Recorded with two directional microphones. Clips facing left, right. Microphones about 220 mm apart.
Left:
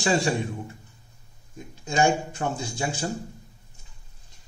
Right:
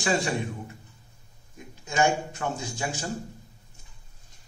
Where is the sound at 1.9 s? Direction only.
30° left (ahead or behind).